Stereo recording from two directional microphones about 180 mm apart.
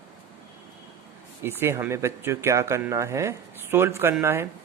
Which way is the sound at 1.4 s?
15° right (ahead or behind).